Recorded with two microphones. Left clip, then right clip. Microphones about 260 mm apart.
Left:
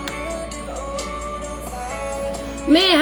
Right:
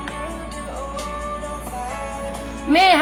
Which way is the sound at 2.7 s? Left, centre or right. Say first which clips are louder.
Right 2 dB; centre.